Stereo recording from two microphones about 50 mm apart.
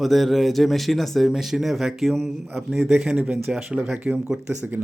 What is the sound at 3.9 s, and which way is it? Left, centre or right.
Speech, right.